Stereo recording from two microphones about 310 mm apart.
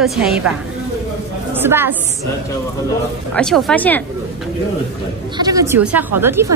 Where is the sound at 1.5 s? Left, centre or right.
Centre.